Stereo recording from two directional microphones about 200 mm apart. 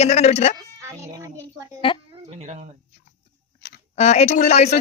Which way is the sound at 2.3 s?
35° right (ahead or behind).